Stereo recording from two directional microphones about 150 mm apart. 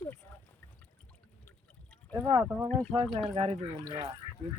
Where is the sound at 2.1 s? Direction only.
20° right (ahead or behind).